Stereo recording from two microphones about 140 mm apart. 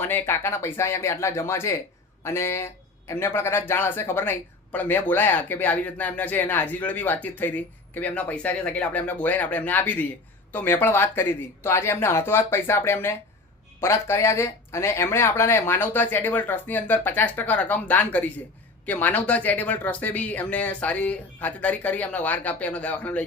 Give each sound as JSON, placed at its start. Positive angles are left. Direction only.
{"t": 0.0, "sound": "speech", "side_deg": 15}